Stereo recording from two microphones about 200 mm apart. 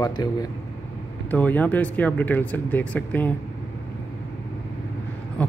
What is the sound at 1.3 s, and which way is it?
Speech, 10° left (ahead or behind).